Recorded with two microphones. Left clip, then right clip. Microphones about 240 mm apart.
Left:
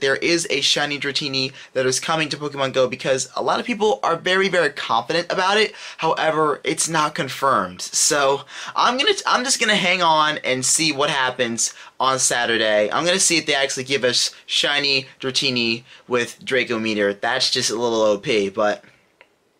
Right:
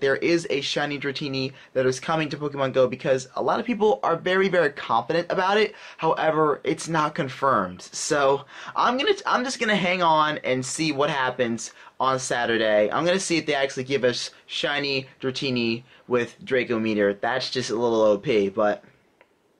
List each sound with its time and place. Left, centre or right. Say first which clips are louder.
0.0 s speech: left 3 dB; centre
7.4 s speech: left 3 dB; right
8.1 s speech: left 1 dB; centre